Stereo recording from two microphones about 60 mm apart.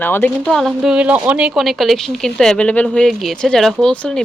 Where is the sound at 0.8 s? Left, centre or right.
Centre.